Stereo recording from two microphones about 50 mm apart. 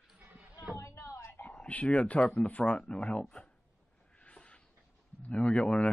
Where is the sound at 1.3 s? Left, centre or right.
Left.